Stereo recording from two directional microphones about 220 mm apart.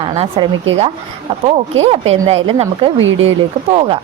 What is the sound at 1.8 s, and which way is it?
A woman's voice, 25° right (ahead or behind).